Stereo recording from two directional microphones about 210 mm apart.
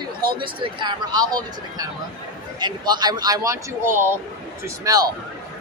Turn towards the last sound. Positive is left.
turn(degrees=-15)  # may be behind; listen again after turning